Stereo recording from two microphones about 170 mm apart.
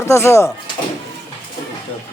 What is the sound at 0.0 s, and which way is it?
Speech, 15° left (ahead or behind).